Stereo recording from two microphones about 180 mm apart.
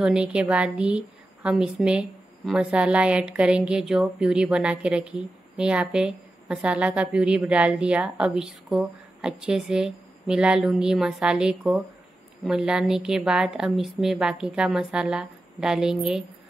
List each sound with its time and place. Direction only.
0.0 s a woman's voice: 5° right (ahead or behind)